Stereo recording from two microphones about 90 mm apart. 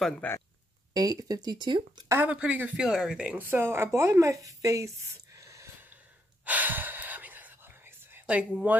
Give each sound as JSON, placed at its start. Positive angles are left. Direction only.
{"t": 0.2, "sound": "speech", "side_deg": 15}
{"t": 0.9, "sound": "speech", "side_deg": -45}
{"t": 2.2, "sound": "speech", "side_deg": -15}
{"t": 3.3, "sound": "speech", "side_deg": -25}
{"t": 6.4, "sound": "gasp", "side_deg": -20}
{"t": 8.3, "sound": "speech", "side_deg": -10}